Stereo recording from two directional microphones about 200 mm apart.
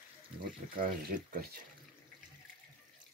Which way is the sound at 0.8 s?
45° right (ahead or behind).